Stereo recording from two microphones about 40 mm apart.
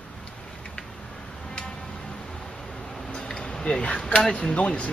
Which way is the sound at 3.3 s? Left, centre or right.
Centre.